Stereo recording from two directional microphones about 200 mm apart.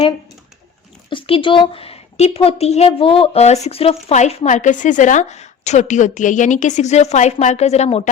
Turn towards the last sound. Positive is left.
turn(degrees=35)  # may be behind; listen again after turning